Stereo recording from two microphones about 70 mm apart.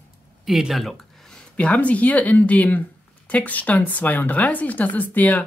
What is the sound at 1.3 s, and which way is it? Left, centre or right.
Speech, centre.